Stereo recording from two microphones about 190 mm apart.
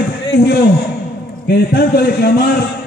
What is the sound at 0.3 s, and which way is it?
A man's voice, 65° left (ahead or behind).